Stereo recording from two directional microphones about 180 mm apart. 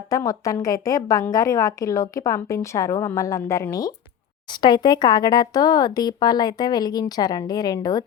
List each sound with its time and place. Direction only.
0.1 s a woman's voice: 20° left (ahead or behind)